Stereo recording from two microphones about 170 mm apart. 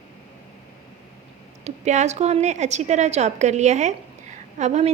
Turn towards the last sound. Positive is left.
turn(degrees=-40)  # may be behind; listen again after turning